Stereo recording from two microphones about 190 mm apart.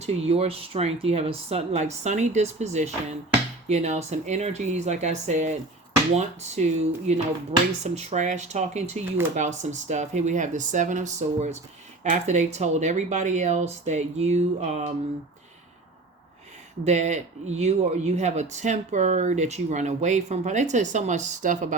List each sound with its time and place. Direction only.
0.0 s speech: 35° right (ahead or behind)
16.8 s speech: 40° right (ahead or behind)